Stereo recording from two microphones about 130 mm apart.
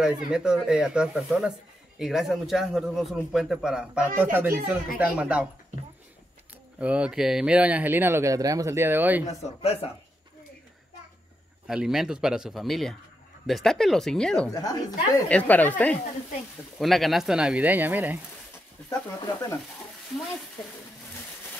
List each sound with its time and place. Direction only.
0.0 s a man's voice: 5° right (ahead or behind)
4.2 s speech: 15° right (ahead or behind)
6.8 s speech: 10° right (ahead or behind)
9.2 s speech: 55° left (ahead or behind)
11.6 s a man's voice: 5° right (ahead or behind)
14.5 s speech: 30° left (ahead or behind)
15.2 s speech: 10° left (ahead or behind)
16.7 s a man's voice: centre (ahead or behind)
18.9 s speech: 20° left (ahead or behind)